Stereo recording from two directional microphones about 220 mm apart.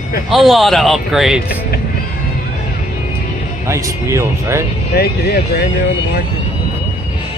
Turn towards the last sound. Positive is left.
turn(degrees=45)  # may be behind; listen again after turning